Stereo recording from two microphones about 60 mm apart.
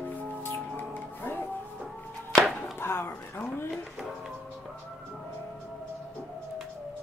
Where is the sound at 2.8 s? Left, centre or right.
Left.